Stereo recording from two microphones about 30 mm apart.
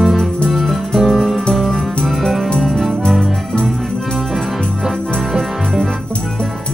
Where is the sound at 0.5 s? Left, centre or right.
Centre.